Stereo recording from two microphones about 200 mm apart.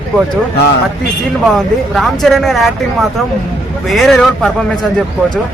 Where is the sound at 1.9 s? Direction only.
Centre (ahead or behind).